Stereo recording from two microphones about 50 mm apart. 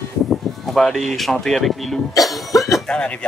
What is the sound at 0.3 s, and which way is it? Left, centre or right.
Sheep, centre.